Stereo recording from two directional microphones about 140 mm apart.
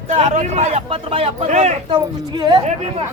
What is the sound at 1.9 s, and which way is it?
Speech, 30° right (ahead or behind).